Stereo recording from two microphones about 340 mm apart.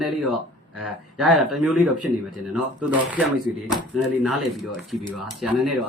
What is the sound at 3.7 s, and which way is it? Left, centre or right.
Speech, centre.